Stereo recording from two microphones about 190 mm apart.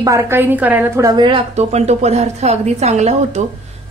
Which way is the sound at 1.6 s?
35° right (ahead or behind).